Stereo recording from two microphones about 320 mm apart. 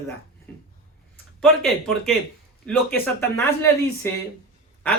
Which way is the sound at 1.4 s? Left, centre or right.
Centre.